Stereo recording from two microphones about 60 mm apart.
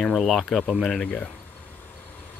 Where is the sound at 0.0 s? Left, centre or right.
Centre.